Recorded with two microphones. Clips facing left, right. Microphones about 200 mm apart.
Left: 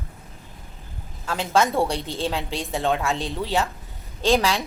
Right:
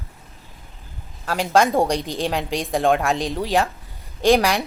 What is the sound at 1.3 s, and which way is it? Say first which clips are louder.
A woman's voice: right 3 dB; 15° right (ahead or behind).